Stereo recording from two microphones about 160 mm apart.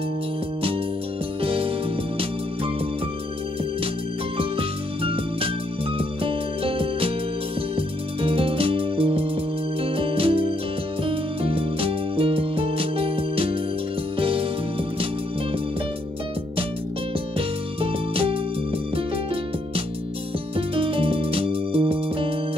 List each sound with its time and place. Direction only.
1.4 s music: 35° right (ahead or behind)
4.4 s music: 35° right (ahead or behind)
17.4 s music: 35° right (ahead or behind)
20.5 s music: 35° right (ahead or behind)